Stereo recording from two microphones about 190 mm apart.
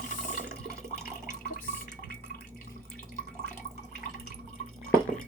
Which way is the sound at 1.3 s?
45° left (ahead or behind).